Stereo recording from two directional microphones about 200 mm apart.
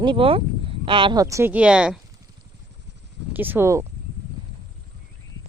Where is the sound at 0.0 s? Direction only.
25° right (ahead or behind); by 2.0 s 5° right (ahead or behind).